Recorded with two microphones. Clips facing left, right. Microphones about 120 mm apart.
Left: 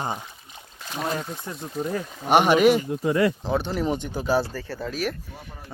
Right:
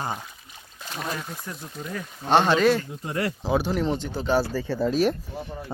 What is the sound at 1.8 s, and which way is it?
Speech, 40° left (ahead or behind).